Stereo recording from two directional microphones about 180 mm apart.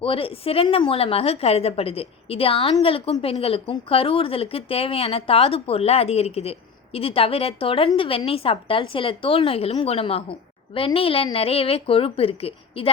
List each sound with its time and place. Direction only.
0.0 s speech: 30° left (ahead or behind)